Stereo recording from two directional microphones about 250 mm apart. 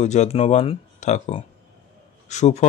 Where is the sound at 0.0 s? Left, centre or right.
Left.